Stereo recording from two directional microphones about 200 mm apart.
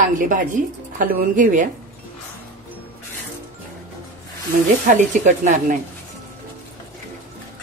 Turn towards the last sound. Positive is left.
turn(degrees=-40)  # may be behind; listen again after turning